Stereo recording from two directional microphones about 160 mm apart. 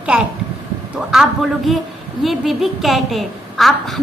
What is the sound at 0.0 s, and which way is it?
A child's voice, 5° right (ahead or behind).